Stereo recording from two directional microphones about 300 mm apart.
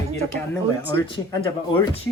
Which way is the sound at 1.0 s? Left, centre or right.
Centre.